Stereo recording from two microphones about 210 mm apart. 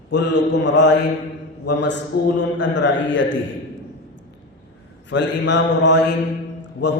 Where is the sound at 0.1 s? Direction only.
60° left (ahead or behind).